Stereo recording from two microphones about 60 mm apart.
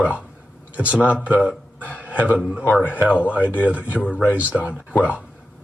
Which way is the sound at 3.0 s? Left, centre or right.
Right.